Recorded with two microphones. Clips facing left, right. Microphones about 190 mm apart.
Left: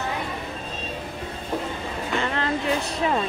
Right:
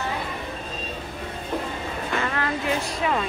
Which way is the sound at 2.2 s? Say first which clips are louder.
Left 1 dB; 25° left (ahead or behind).